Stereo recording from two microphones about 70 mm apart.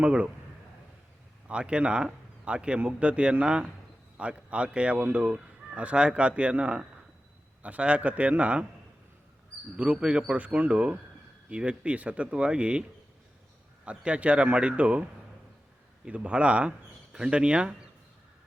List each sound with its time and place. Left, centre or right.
0.0 s speech: centre
1.5 s a man's voice: centre
9.7 s speech: centre
13.8 s speech: centre
16.0 s speech: centre